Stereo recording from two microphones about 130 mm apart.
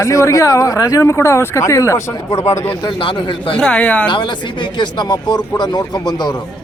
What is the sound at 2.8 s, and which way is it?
Speech, 40° left (ahead or behind).